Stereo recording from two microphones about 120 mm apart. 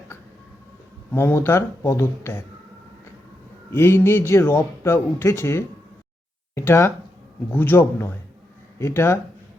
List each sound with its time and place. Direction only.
1.1 s speech: 20° left (ahead or behind)
3.7 s a man's voice: 20° left (ahead or behind)